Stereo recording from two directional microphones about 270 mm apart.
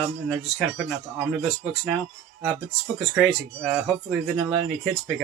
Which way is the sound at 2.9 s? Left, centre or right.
Centre.